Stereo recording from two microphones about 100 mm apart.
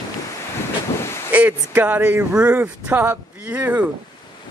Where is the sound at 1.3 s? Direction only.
15° right (ahead or behind).